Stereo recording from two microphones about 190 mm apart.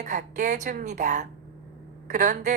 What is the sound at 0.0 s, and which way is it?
A woman's voice, 40° right (ahead or behind).